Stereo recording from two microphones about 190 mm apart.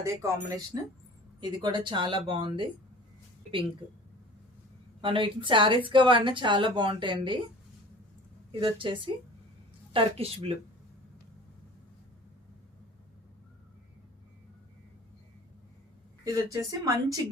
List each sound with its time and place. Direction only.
0.0 s a woman's voice: 15° right (ahead or behind)
4.9 s a woman's voice: 25° right (ahead or behind)
8.5 s a woman's voice: 25° right (ahead or behind)
16.2 s a woman's voice: 15° right (ahead or behind)